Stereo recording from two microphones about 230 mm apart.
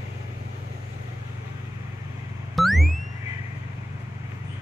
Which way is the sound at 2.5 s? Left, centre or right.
Centre.